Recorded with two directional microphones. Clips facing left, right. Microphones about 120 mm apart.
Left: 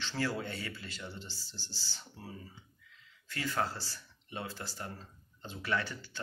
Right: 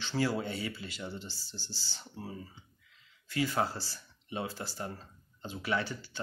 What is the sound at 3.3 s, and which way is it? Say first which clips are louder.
Speech: right 4 dB; 10° right (ahead or behind).